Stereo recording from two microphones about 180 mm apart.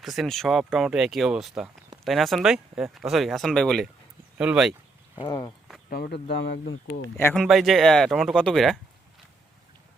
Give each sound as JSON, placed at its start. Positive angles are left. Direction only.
{"t": 0.0, "sound": "speech", "side_deg": 0}
{"t": 5.2, "sound": "speech", "side_deg": 20}
{"t": 5.9, "sound": "speech", "side_deg": 60}
{"t": 6.8, "sound": "speech", "side_deg": 75}
{"t": 7.2, "sound": "speech", "side_deg": 15}
{"t": 7.4, "sound": "speech", "side_deg": 0}